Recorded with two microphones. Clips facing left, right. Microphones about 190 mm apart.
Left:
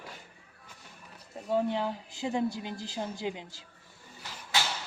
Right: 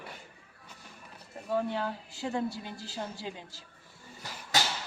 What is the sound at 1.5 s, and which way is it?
A woman's voice, 15° left (ahead or behind).